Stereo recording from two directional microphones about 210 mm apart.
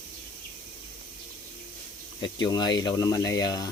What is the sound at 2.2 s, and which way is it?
Speech, 20° left (ahead or behind).